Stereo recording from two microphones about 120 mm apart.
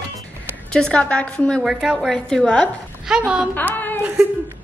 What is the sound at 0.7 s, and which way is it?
Speech, 10° left (ahead or behind).